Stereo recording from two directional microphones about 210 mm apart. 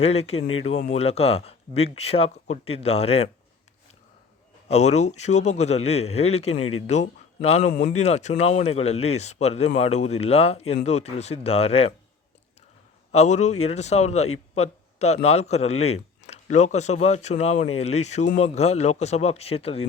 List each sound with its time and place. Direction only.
0.0 s speech: 30° left (ahead or behind)
4.7 s speech: 30° left (ahead or behind)
13.1 s speech: 30° left (ahead or behind)